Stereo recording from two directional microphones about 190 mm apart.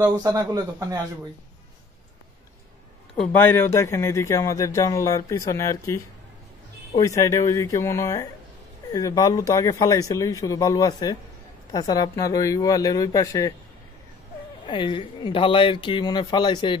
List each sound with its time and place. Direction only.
0.2 s speech: 20° right (ahead or behind)
3.2 s speech: 10° left (ahead or behind)
7.0 s speech: 15° left (ahead or behind)
14.7 s speech: 25° left (ahead or behind)